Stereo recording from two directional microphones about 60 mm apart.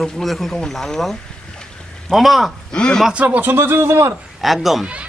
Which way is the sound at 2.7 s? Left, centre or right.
Centre.